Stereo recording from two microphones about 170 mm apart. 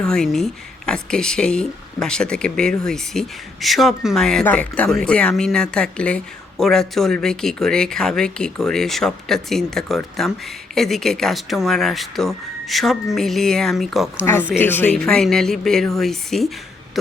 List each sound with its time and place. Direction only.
0.0 s speech: 5° left (ahead or behind)
14.6 s speech: 10° left (ahead or behind)